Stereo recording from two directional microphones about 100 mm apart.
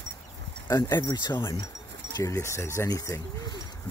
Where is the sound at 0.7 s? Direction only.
40° left (ahead or behind).